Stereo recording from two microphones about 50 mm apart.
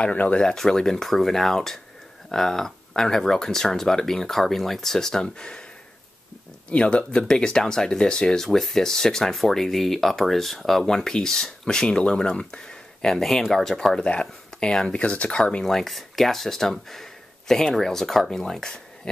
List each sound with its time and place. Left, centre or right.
0.0 s speech: left
0.4 s speech: centre
6.7 s speech: left
8.5 s speech: centre
13.9 s speech: left
15.6 s speech: centre
16.7 s a sound: centre
17.7 s speech: centre